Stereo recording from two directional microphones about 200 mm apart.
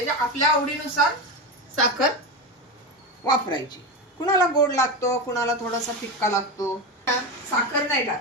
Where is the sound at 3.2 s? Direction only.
20° left (ahead or behind).